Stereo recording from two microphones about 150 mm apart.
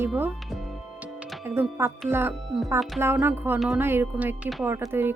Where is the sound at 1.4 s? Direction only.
15° right (ahead or behind).